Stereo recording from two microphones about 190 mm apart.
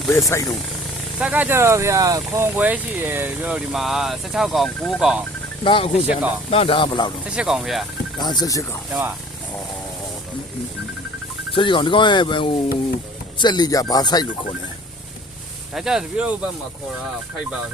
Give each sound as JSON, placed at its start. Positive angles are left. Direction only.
{"t": 0.3, "sound": "speech", "side_deg": 15}
{"t": 1.2, "sound": "speech", "side_deg": -10}
{"t": 5.6, "sound": "speech", "side_deg": 30}
{"t": 7.3, "sound": "speech", "side_deg": -5}
{"t": 8.2, "sound": "speech", "side_deg": 20}
{"t": 11.5, "sound": "speech", "side_deg": 25}
{"t": 15.7, "sound": "speech", "side_deg": 0}